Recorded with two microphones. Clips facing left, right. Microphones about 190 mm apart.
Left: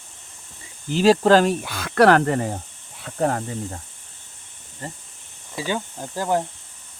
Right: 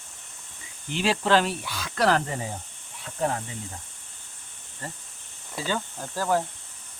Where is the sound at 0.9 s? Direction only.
40° left (ahead or behind).